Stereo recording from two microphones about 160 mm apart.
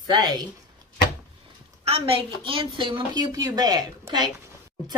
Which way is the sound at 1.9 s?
35° right (ahead or behind).